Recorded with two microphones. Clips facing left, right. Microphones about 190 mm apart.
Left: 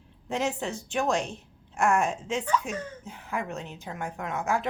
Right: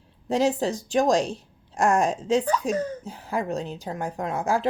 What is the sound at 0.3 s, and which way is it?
Speech, 35° right (ahead or behind).